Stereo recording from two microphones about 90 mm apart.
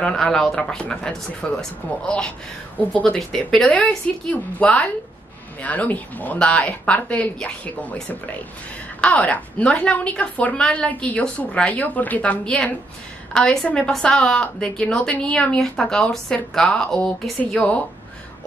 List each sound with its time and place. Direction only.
0.0 s a woman's voice: 5° left (ahead or behind)
3.7 s a woman's voice: 15° left (ahead or behind)